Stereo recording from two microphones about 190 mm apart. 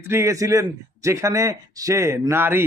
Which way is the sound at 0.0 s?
15° right (ahead or behind).